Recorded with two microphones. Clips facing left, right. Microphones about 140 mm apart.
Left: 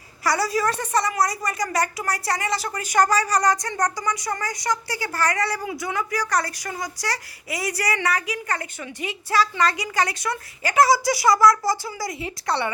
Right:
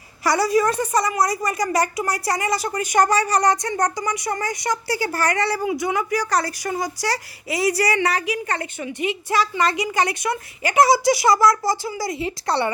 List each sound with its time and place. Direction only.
0.3 s speech: 20° right (ahead or behind)